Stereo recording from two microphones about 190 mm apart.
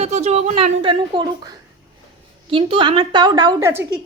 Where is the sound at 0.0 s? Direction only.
35° right (ahead or behind).